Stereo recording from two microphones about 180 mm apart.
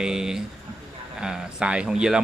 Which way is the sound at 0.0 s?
5° right (ahead or behind).